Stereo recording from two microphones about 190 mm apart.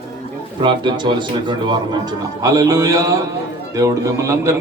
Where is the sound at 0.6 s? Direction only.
25° right (ahead or behind).